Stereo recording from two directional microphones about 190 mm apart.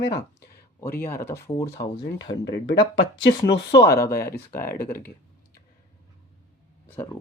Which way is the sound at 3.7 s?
15° left (ahead or behind).